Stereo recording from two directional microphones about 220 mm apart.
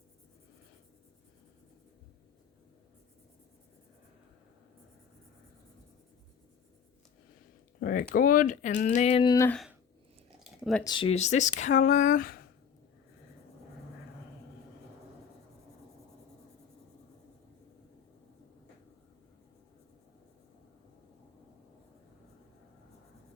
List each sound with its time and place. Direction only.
7.8 s speech: 40° left (ahead or behind)
9.3 s speech: 15° left (ahead or behind)
10.4 s a sound: centre (ahead or behind)
10.8 s speech: 20° left (ahead or behind); by 12.4 s 40° left (ahead or behind)